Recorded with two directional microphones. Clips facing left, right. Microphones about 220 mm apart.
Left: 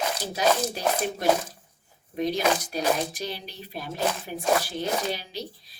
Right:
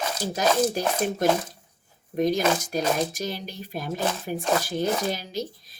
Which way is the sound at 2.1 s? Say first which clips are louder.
Right 2 dB; 45° right (ahead or behind).